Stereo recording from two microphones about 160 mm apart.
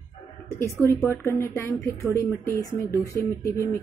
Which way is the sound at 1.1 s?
15° left (ahead or behind).